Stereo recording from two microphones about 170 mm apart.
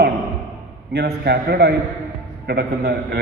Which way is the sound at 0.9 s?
70° right (ahead or behind).